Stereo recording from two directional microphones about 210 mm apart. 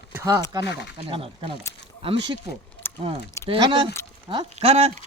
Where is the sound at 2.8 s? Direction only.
10° left (ahead or behind).